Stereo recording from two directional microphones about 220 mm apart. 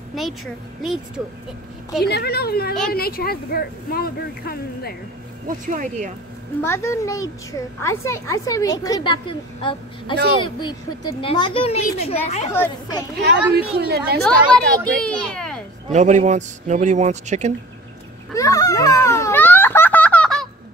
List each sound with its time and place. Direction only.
0.1 s speech: centre (ahead or behind)
2.0 s speech: 45° left (ahead or behind)
5.7 s a man's voice: 35° right (ahead or behind)
6.6 s a woman's voice: 10° left (ahead or behind); by 12.4 s 30° left (ahead or behind)
13.2 s speech: 45° right (ahead or behind)
14.2 s a woman's voice: 5° left (ahead or behind)
15.9 s a man's voice: 30° right (ahead or behind)
18.3 s a sound: 15° left (ahead or behind)